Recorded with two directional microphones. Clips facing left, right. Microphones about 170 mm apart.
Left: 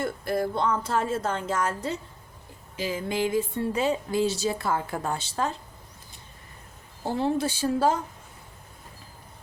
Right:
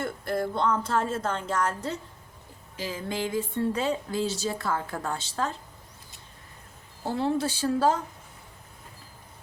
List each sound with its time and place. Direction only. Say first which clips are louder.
0.0 s speech: left 2 dB; 10° left (ahead or behind)
7.0 s speech: left 1 dB; 15° left (ahead or behind)